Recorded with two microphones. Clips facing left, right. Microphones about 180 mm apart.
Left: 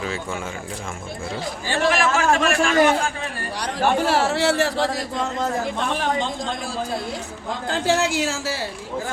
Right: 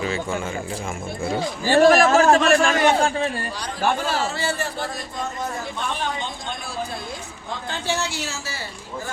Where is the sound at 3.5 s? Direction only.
70° left (ahead or behind); by 6.5 s 90° left.